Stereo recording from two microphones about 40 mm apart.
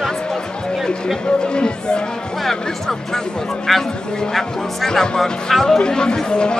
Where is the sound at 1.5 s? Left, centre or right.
Left.